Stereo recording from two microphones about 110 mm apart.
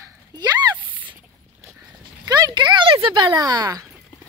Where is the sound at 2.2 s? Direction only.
40° right (ahead or behind).